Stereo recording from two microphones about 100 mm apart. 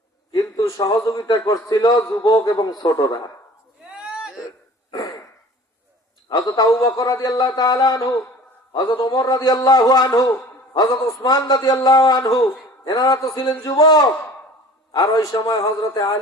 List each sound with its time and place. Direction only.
0.3 s a man's voice: 40° left (ahead or behind)
3.9 s a sound: 10° right (ahead or behind)
4.9 s a sound: 35° left (ahead or behind)
6.2 s a man's voice: 40° left (ahead or behind)
6.7 s speech: 25° left (ahead or behind)
7.0 s a man's voice: 40° left (ahead or behind)